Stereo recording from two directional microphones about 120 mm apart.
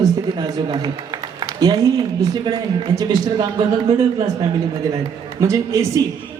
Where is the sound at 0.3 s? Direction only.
35° right (ahead or behind).